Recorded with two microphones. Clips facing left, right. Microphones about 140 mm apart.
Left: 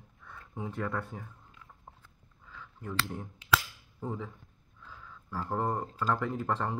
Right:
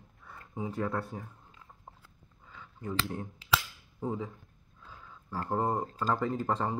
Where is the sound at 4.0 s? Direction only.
15° right (ahead or behind).